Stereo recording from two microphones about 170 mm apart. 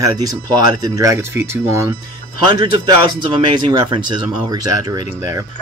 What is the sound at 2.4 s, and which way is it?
Speech, 25° right (ahead or behind).